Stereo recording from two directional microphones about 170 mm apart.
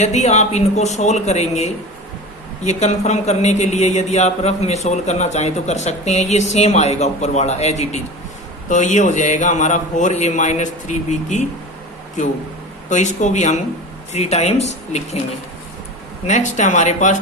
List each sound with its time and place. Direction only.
0.0 s a man's voice: 40° left (ahead or behind)
12.9 s a man's voice: 45° left (ahead or behind)
16.2 s a man's voice: 45° left (ahead or behind)